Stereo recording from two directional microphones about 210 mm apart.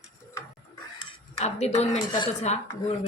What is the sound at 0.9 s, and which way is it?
Speech, 30° left (ahead or behind).